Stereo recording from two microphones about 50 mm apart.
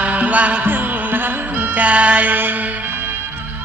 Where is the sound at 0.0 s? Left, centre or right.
Right.